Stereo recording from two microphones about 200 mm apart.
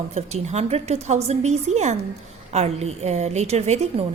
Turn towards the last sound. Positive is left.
turn(degrees=-35)  # may be behind; listen again after turning